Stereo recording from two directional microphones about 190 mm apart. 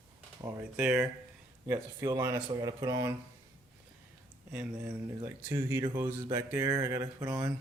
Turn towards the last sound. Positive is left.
turn(degrees=-15)  # may be behind; listen again after turning